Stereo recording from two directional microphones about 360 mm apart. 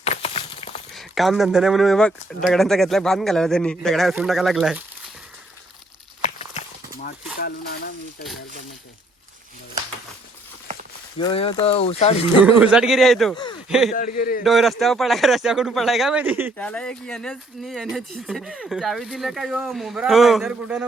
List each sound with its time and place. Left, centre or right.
0.0 s a sound: centre
0.9 s speech: centre
6.2 s walk: centre
6.9 s speech: left
11.2 s speech: centre
12.4 s speech: centre
13.3 s a sound: centre
13.7 s speech: centre
14.2 s a man's voice: left
14.4 s speech: centre